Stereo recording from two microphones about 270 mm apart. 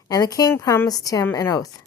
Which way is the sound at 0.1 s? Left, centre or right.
Centre.